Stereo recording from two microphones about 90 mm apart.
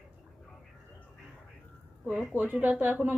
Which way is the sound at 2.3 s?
20° right (ahead or behind).